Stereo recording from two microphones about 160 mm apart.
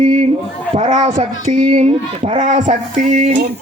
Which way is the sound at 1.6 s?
35° right (ahead or behind).